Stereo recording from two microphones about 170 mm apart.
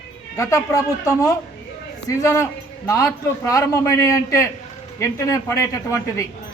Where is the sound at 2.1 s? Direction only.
20° left (ahead or behind).